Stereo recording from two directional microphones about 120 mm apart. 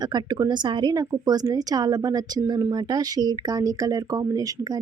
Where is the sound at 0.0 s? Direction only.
35° right (ahead or behind).